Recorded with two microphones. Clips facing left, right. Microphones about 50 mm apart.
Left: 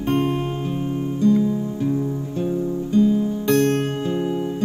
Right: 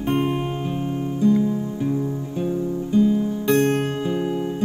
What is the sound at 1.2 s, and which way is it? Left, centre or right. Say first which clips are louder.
Music: left 1 dB; right.